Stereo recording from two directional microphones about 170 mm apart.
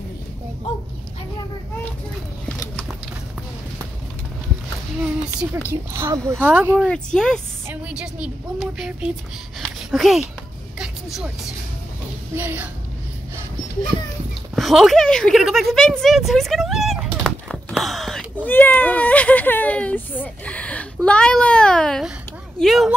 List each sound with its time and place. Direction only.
5.9 s speech: 15° right (ahead or behind)
6.9 s a woman's voice: 5° left (ahead or behind)
7.6 s a woman's voice: 10° right (ahead or behind)
9.6 s a sound: centre (ahead or behind)
10.8 s music: centre (ahead or behind)
12.4 s speech: 10° right (ahead or behind)
14.5 s a woman's voice: centre (ahead or behind)